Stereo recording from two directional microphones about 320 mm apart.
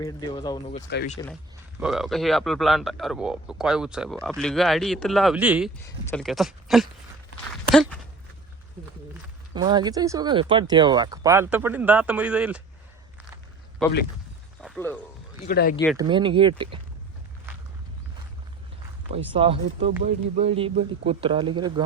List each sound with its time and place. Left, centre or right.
0.0 s speech: centre
0.9 s speech: left
1.8 s speech: centre
9.6 s speech: centre
13.8 s speech: centre
14.6 s a sound: centre
15.4 s speech: left
15.7 s speech: centre
16.0 s speech: centre
19.1 s speech: centre